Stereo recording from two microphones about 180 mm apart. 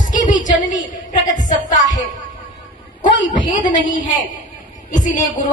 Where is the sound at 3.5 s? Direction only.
45° left (ahead or behind).